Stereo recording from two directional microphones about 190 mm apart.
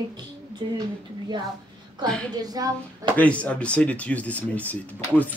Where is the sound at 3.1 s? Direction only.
5° left (ahead or behind).